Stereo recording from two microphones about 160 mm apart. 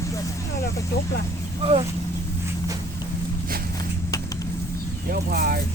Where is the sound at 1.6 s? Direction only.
40° right (ahead or behind).